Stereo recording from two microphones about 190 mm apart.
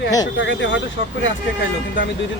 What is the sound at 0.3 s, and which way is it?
Speech, 80° left.